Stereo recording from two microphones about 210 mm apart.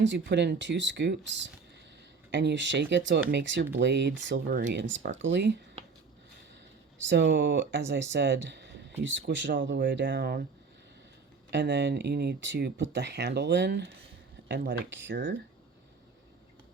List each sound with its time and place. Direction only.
0.0 s speech: 60° right (ahead or behind)
4.4 s speech: 45° right (ahead or behind)
7.0 s speech: 60° right (ahead or behind)
11.5 s speech: 55° right (ahead or behind)